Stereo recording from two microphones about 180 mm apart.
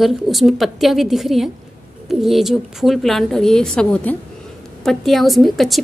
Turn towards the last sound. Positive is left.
turn(degrees=0)  # may be behind; listen again after turning